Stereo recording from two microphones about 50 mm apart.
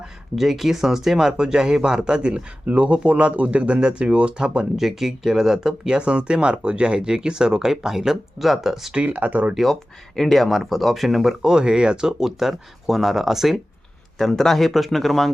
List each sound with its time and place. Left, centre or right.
0.3 s speech: centre; by 4.6 s right
4.8 s speech: centre
9.0 s speech: right
10.2 s speech: centre
14.2 s speech: centre